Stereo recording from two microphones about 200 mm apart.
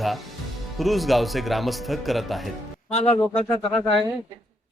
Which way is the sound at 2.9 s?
30° left (ahead or behind).